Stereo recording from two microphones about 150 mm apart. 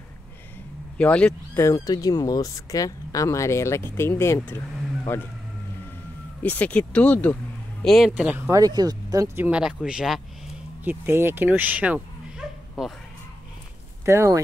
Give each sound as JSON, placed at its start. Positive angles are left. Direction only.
{"t": 0.9, "sound": "speech", "side_deg": 5}
{"t": 1.6, "sound": "speech", "side_deg": 20}
{"t": 6.4, "sound": "speech", "side_deg": 10}
{"t": 8.1, "sound": "speech", "side_deg": -10}
{"t": 8.5, "sound": "speech", "side_deg": -25}
{"t": 10.8, "sound": "speech", "side_deg": -15}
{"t": 14.0, "sound": "speech", "side_deg": -20}